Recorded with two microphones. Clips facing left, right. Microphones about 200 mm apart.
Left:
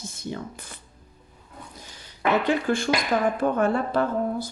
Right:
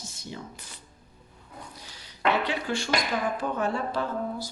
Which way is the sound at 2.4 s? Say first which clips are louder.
Left 6 dB; 50° left (ahead or behind).